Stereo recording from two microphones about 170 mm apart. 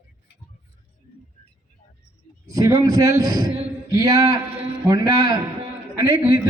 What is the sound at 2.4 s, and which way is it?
A man's voice, 20° right (ahead or behind).